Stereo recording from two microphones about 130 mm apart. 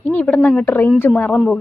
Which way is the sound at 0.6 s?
15° left (ahead or behind).